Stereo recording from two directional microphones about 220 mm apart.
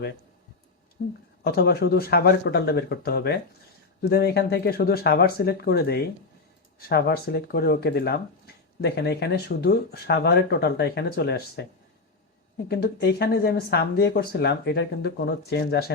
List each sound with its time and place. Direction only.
1.0 s speech: 50° left (ahead or behind)
12.6 s speech: 50° left (ahead or behind)